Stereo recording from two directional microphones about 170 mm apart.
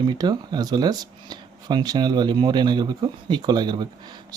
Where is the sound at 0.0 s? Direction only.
25° right (ahead or behind).